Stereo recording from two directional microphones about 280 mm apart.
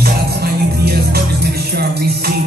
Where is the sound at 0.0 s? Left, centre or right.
Right.